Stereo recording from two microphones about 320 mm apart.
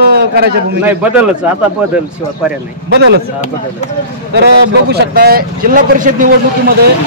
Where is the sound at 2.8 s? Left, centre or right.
Right.